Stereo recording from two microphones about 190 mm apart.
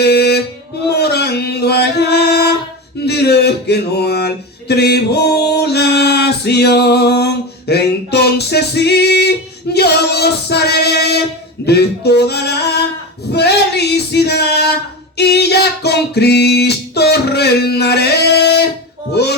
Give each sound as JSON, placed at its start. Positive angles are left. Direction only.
{"t": 0.0, "sound": "mantra", "side_deg": 60}
{"t": 0.9, "sound": "music", "side_deg": 60}
{"t": 3.1, "sound": "a sound", "side_deg": 60}
{"t": 4.7, "sound": "music", "side_deg": 60}
{"t": 9.7, "sound": "singing", "side_deg": 60}
{"t": 11.6, "sound": "a sound", "side_deg": 60}
{"t": 13.3, "sound": "singing", "side_deg": 60}